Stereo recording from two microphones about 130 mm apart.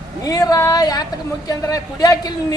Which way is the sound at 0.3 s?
30° left (ahead or behind).